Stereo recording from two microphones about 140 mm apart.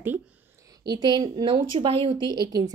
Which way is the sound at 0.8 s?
30° right (ahead or behind).